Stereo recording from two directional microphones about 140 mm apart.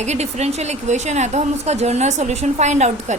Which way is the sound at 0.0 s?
50° right (ahead or behind).